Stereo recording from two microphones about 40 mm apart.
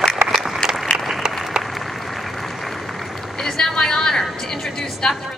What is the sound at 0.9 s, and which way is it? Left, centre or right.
Applause, centre.